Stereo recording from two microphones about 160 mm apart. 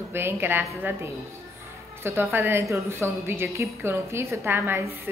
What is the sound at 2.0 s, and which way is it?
A woman's voice, 15° right (ahead or behind).